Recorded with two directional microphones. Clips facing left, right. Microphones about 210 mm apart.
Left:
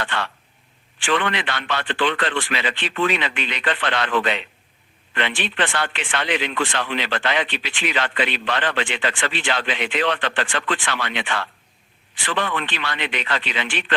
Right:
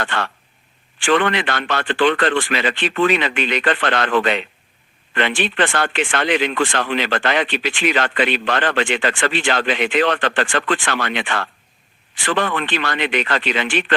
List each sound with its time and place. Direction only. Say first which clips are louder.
0.0 s speech: right 3 dB; 45° right (ahead or behind)